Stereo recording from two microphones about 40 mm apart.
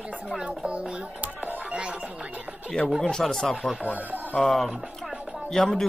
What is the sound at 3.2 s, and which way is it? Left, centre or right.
Speech, centre.